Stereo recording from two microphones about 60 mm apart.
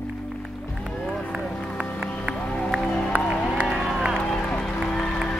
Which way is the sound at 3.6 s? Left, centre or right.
Centre.